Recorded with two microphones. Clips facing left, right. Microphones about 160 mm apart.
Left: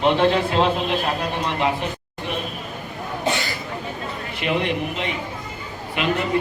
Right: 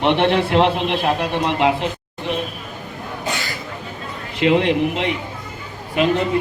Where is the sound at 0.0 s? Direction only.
70° right (ahead or behind); by 1.9 s 90° right.